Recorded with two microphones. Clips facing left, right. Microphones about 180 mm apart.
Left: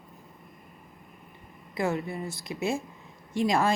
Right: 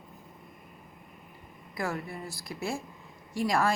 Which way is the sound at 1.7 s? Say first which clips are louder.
Left 5 dB; 20° left (ahead or behind).